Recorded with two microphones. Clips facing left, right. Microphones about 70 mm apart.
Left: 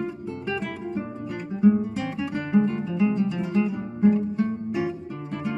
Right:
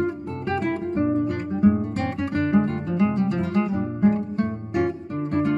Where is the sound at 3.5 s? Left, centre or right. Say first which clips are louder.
Right 2 dB; right.